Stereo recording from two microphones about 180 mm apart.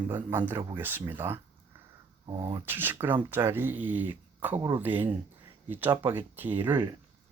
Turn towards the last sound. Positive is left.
turn(degrees=-10)  # may be behind; listen again after turning